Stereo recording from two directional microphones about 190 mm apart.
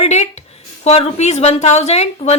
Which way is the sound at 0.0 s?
35° left (ahead or behind).